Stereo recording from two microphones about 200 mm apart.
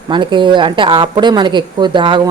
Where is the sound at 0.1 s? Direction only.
25° right (ahead or behind).